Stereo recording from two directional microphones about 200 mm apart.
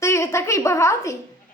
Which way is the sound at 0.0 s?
15° left (ahead or behind).